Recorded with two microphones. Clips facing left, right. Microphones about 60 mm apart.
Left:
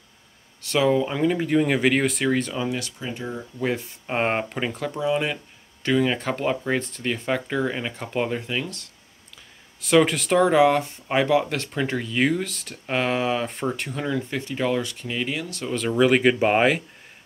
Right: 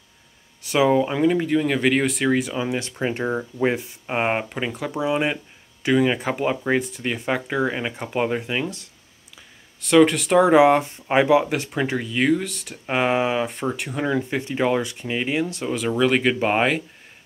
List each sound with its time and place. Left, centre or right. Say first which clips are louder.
0.6 s speech: right 2 dB; centre
1.2 s speech: right 1 dB; centre
3.0 s speech: right 7 dB; right
3.7 s speech: right 1 dB; centre
4.9 s speech: right 3 dB; centre
9.8 s speech: right 3 dB; centre
10.4 s speech: right 3 dB; centre
12.8 s speech: right 3 dB; centre
13.5 s speech: right 1 dB; centre; by 15.7 s right
16.0 s speech: left 2 dB; centre